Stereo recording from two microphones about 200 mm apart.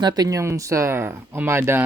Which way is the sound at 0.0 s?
20° right (ahead or behind).